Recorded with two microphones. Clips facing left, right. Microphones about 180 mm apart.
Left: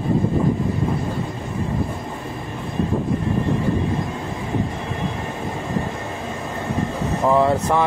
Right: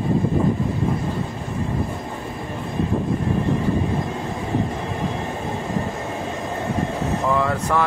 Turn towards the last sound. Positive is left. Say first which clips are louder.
# left 4 dB
turn(degrees=25)  # may be behind; listen again after turning